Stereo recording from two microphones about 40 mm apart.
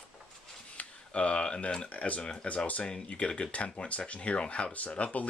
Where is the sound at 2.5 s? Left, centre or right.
Left.